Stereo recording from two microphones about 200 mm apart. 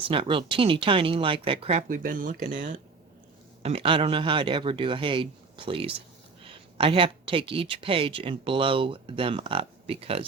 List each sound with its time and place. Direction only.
0.1 s speech: 25° right (ahead or behind)
1.9 s speech: 45° right (ahead or behind)
3.6 s speech: 30° right (ahead or behind)